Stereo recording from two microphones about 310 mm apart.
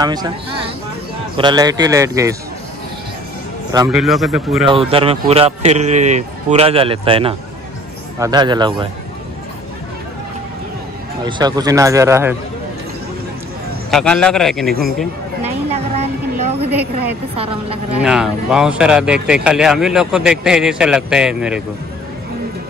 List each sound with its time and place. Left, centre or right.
0.0 s speech: centre
3.9 s speech: centre
4.6 s a man's voice: centre
11.2 s speech: centre
13.8 s speech: centre
15.4 s a sound: right
17.9 s speech: centre